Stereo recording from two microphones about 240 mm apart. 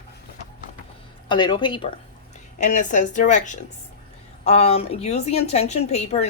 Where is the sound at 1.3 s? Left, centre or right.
Centre.